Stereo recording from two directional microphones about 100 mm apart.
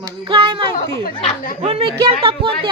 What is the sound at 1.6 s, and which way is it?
Speech, 70° right (ahead or behind).